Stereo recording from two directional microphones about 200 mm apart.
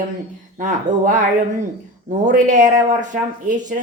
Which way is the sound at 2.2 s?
40° right (ahead or behind).